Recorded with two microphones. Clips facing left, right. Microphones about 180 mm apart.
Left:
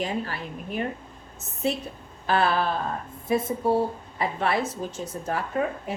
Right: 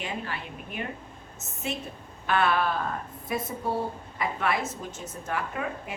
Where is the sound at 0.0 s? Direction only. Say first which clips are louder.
Left 5 dB; 40° left (ahead or behind).